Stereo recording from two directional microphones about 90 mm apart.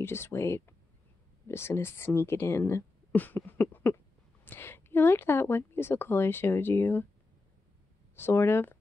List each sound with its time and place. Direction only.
0.0 s a woman's voice: 25° left (ahead or behind)
8.2 s a woman's voice: 30° left (ahead or behind)